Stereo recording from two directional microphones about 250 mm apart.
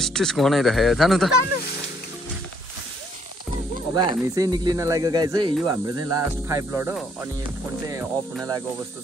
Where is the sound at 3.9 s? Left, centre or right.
Centre.